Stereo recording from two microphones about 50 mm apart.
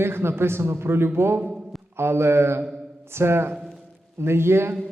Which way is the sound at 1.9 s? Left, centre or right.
Right.